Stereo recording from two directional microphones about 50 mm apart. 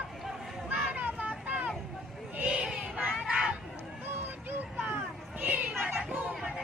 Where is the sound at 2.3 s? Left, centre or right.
Right.